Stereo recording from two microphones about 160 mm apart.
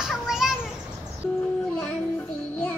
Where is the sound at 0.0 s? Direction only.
Centre (ahead or behind).